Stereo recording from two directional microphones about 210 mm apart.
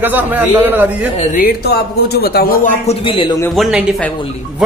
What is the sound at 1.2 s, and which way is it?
Speech, 45° left (ahead or behind).